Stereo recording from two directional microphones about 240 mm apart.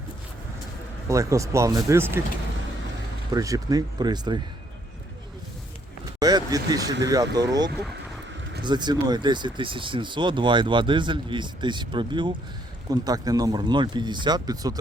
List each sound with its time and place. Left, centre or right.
1.0 s speech: centre
3.3 s speech: centre
6.1 s speech: centre